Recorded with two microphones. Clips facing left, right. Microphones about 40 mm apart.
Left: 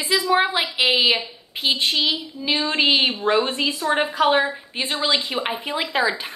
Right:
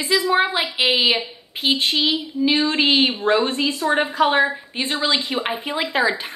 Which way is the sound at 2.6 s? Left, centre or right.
Centre.